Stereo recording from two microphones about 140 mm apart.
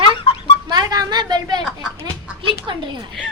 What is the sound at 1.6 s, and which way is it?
Speech, 5° right (ahead or behind).